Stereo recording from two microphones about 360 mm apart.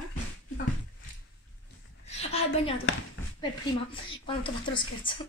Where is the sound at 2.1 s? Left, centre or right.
Centre.